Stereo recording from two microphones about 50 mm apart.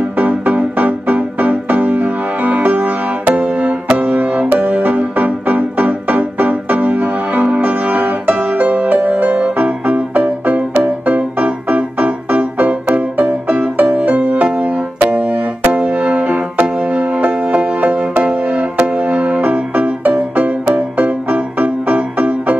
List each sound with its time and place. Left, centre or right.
0.2 s music: right